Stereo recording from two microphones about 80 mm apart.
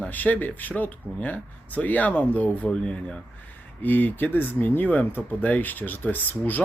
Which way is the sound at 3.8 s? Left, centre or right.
Left.